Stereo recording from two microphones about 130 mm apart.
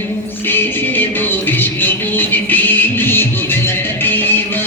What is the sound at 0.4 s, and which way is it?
Music, 15° left (ahead or behind).